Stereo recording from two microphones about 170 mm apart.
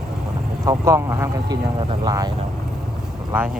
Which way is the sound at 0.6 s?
20° right (ahead or behind).